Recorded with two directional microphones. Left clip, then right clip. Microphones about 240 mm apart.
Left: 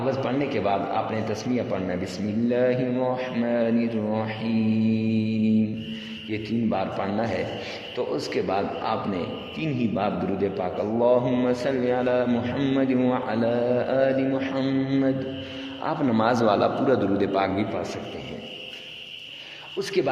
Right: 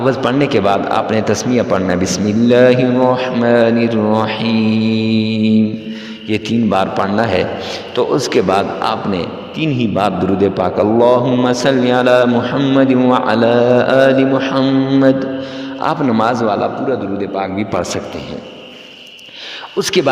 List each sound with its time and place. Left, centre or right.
0.1 s a man's voice: right; by 17.5 s centre
19.8 s a man's voice: right